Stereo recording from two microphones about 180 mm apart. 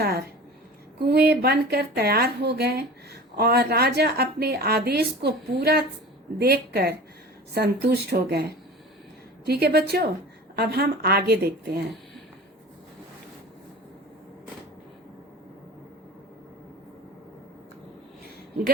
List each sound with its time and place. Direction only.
0.0 s a woman's voice: 60° right (ahead or behind)